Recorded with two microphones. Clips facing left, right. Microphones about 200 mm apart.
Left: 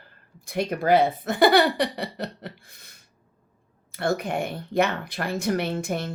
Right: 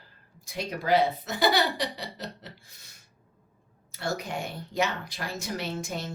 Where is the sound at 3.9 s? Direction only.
55° left (ahead or behind).